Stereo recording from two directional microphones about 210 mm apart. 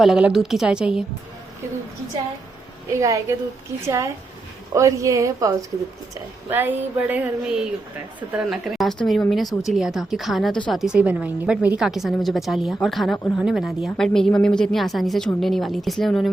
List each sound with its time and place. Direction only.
0.0 s speech: 5° right (ahead or behind)
3.0 s a sound: 15° right (ahead or behind)
8.3 s speech: centre (ahead or behind)